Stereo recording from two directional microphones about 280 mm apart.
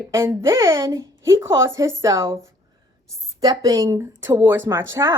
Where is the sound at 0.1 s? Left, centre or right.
Centre.